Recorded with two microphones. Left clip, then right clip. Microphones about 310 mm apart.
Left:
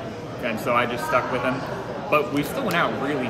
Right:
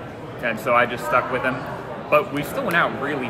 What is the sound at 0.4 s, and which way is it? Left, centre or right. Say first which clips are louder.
Speech: right 4 dB; centre.